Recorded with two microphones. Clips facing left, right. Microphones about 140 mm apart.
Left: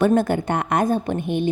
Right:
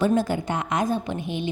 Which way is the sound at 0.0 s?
60° left (ahead or behind).